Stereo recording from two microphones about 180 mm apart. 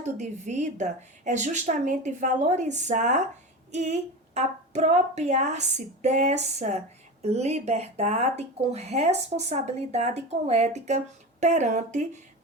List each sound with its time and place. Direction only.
0.0 s a woman's voice: 40° right (ahead or behind)